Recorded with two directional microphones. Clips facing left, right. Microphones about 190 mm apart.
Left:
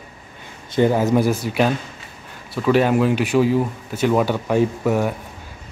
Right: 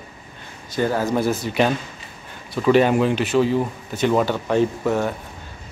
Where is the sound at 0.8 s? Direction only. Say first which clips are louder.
Left 4 dB; 20° left (ahead or behind).